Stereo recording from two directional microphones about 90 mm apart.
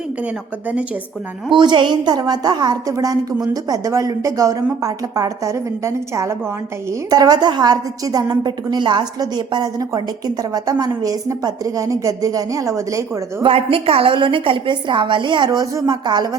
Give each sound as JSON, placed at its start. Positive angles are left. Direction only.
{"t": 1.5, "sound": "a woman's voice", "side_deg": -60}
{"t": 7.1, "sound": "a woman's voice", "side_deg": -50}
{"t": 13.4, "sound": "a woman's voice", "side_deg": -90}
{"t": 15.5, "sound": "a woman's voice", "side_deg": -45}